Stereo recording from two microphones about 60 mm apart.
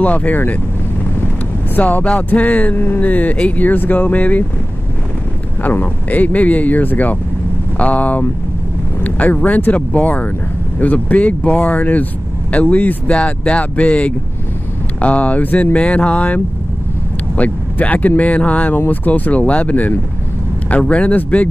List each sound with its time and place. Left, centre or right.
0.0 s speech: left
1.8 s speech: left
5.6 s speech: left
17.4 s speech: left